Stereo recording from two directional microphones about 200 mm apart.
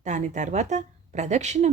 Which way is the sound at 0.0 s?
35° right (ahead or behind).